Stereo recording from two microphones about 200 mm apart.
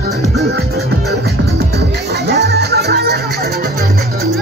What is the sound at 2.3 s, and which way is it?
Music, 55° right (ahead or behind).